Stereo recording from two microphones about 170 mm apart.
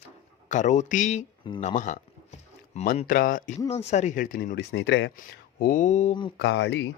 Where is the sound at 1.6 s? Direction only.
45° left (ahead or behind).